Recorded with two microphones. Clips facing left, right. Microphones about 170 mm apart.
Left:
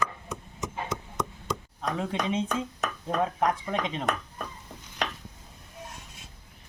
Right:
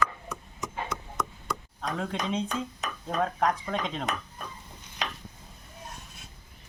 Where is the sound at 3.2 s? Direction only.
10° left (ahead or behind).